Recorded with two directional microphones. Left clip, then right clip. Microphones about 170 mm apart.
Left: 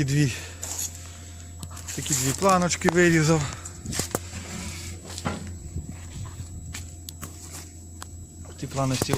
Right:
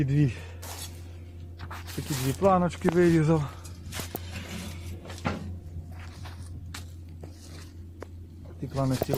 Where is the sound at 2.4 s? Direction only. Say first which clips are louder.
Left 2 dB; 20° left (ahead or behind).